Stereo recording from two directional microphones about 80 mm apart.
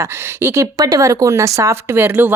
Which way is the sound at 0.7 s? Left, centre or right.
Right.